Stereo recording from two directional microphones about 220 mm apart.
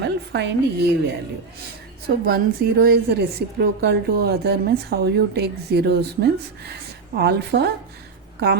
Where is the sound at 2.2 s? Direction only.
40° right (ahead or behind).